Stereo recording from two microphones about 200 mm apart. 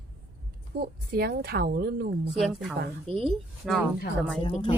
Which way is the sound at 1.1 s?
50° right (ahead or behind).